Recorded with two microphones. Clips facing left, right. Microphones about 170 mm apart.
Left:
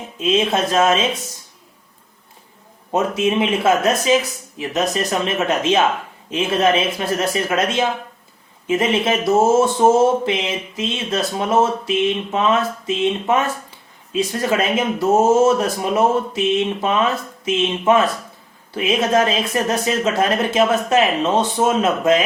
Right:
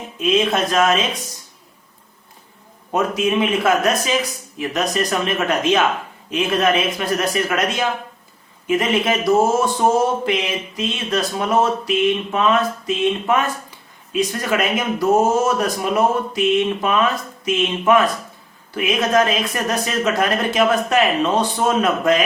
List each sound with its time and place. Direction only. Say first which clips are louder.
0.2 s speech: even; 25° left (ahead or behind)
2.9 s speech: left 1 dB; 25° left (ahead or behind)